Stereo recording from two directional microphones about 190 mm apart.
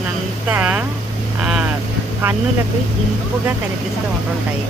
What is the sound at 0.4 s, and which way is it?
Speech, 5° right (ahead or behind).